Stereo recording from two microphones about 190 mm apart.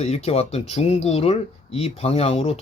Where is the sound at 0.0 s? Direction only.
35° left (ahead or behind).